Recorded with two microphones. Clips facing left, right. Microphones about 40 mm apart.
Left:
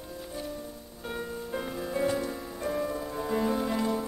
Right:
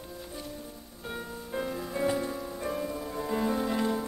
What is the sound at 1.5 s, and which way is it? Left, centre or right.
Music, centre.